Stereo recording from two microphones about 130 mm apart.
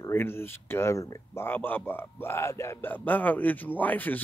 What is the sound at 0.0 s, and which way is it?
A man's voice, 20° left (ahead or behind).